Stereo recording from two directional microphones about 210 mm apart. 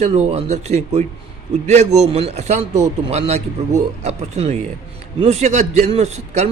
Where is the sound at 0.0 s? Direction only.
30° right (ahead or behind).